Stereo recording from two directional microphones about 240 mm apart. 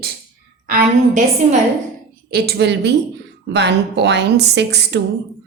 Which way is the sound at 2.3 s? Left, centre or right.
Right.